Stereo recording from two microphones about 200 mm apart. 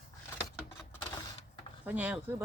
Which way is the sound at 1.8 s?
5° right (ahead or behind).